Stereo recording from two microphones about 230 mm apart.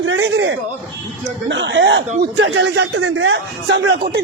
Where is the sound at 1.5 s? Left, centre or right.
Right.